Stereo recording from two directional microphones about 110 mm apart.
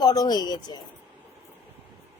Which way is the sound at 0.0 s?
35° left (ahead or behind).